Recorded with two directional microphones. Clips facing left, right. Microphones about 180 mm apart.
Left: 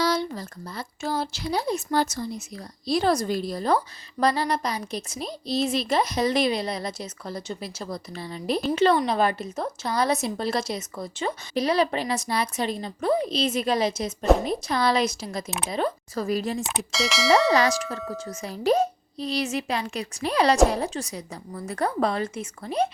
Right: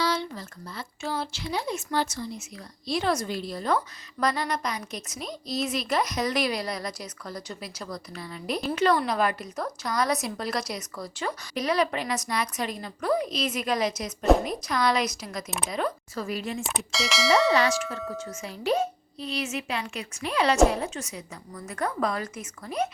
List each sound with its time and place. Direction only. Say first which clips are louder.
0.0 s a woman's voice: left 3 dB; 40° left (ahead or behind)
16.6 s clang: left 3 dB; centre (ahead or behind)
17.5 s speech: left 2 dB; 40° left (ahead or behind)
17.9 s clang: left 1 dB; centre (ahead or behind)
18.4 s speech: left 4 dB; 40° left (ahead or behind)